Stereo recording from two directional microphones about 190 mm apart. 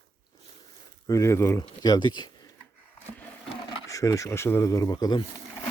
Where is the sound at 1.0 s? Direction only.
15° left (ahead or behind).